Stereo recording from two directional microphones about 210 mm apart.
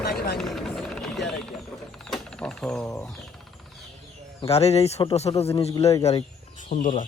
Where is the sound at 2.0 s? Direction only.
5° left (ahead or behind).